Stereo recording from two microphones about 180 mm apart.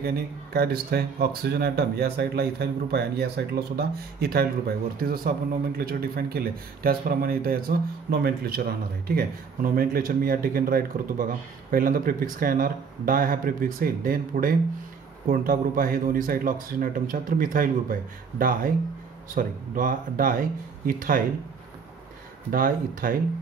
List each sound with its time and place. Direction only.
0.0 s speech: 60° right (ahead or behind)
22.5 s speech: 50° right (ahead or behind)